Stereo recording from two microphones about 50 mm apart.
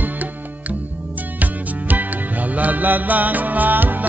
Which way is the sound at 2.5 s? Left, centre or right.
Right.